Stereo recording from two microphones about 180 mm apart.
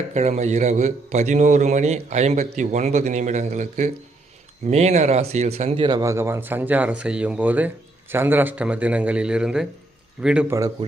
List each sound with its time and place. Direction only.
0.1 s a man's voice: 40° right (ahead or behind); by 10.4 s 5° right (ahead or behind)